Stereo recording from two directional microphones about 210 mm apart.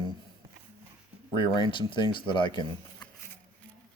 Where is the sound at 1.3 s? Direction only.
20° left (ahead or behind).